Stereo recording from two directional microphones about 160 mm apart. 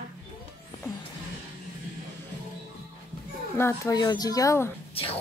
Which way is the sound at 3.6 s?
20° left (ahead or behind).